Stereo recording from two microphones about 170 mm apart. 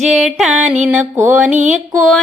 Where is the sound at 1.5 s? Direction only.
45° right (ahead or behind).